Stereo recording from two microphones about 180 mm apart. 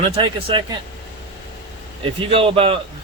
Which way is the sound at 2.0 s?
30° right (ahead or behind).